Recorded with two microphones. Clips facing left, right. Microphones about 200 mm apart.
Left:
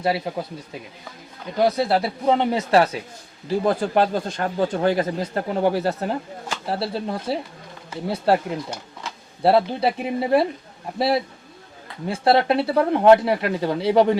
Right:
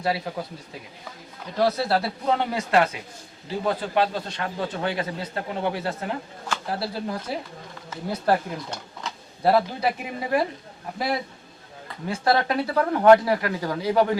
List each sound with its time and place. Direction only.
0.3 s speech: 20° left (ahead or behind)
1.5 s speech: 15° left (ahead or behind)
3.7 s speech: 45° left (ahead or behind)
6.5 s speech: 25° left (ahead or behind)
9.4 s speech: 30° left (ahead or behind)